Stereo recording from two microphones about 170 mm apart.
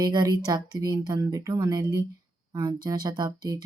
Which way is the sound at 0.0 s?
25° right (ahead or behind).